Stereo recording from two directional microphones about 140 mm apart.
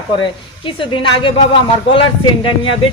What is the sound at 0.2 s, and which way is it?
A man's voice, 35° left (ahead or behind).